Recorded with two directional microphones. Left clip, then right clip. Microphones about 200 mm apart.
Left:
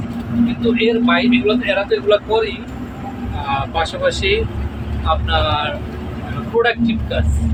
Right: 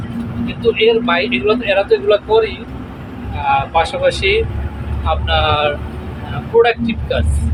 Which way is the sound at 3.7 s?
15° right (ahead or behind).